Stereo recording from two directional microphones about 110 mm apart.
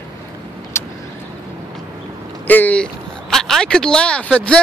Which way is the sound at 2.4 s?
15° left (ahead or behind).